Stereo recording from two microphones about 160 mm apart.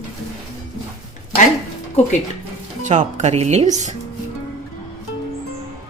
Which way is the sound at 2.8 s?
50° right (ahead or behind).